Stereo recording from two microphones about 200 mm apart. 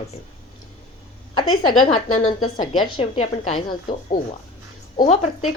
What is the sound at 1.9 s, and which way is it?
Speech, 40° left (ahead or behind).